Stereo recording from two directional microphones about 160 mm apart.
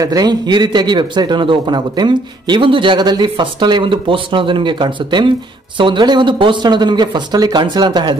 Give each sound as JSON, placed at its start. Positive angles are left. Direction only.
{"t": 0.0, "sound": "a man's voice", "side_deg": -25}